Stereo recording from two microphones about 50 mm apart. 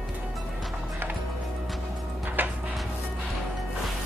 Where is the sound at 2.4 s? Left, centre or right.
Right.